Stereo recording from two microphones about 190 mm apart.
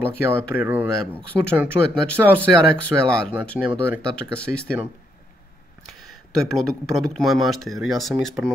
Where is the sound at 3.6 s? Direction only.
10° right (ahead or behind).